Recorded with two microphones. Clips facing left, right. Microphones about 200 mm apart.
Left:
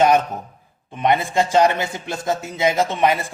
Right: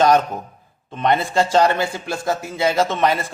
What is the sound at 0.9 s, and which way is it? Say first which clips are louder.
A man's voice: even; 15° left (ahead or behind).